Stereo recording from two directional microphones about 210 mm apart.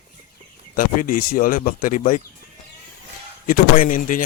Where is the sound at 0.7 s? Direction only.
40° left (ahead or behind).